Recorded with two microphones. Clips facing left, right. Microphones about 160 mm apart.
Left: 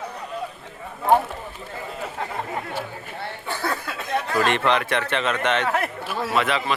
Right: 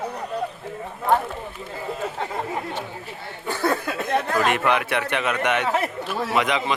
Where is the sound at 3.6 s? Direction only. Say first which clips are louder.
Right 7 dB; 50° right (ahead or behind).